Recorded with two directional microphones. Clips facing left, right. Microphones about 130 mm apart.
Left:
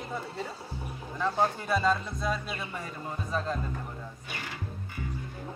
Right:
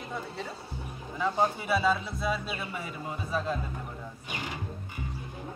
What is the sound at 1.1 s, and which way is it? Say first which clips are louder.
A man's voice: even; 10° right (ahead or behind).